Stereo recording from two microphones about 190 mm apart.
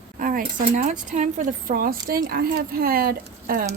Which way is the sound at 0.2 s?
45° right (ahead or behind).